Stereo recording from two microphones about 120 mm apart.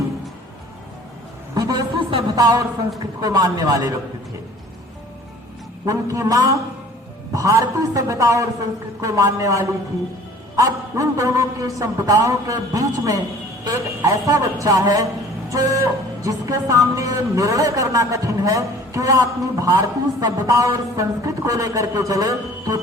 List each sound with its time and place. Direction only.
1.5 s a sound: 30° right (ahead or behind)
2.3 s a man's voice: 30° right (ahead or behind)
5.8 s speech: 25° right (ahead or behind)